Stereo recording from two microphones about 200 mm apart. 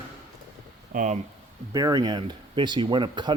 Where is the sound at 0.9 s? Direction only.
35° right (ahead or behind).